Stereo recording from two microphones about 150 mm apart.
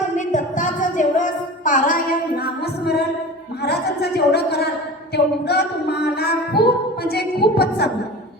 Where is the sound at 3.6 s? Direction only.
90° left.